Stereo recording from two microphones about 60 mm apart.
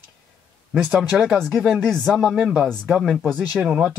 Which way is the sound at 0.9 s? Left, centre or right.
Centre.